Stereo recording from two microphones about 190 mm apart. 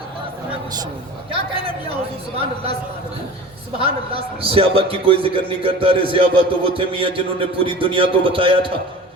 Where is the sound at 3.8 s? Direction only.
30° right (ahead or behind).